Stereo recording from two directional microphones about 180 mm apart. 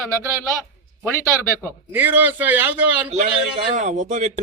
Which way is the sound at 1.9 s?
10° right (ahead or behind).